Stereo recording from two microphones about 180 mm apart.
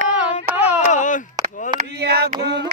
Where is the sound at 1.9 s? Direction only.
60° right (ahead or behind).